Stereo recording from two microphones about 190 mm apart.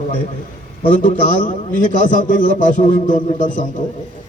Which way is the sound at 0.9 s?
40° left (ahead or behind).